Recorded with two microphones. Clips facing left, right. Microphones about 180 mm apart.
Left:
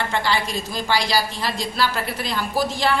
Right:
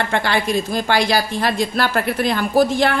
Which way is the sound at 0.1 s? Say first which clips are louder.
Right 4 dB; 55° right (ahead or behind).